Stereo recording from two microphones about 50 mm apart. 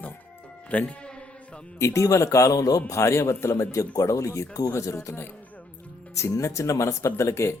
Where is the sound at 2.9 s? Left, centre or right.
Left.